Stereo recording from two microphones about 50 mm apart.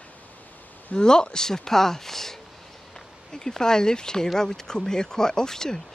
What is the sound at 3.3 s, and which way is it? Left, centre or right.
Speech, centre.